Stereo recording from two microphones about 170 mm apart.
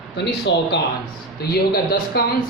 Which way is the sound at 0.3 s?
85° left.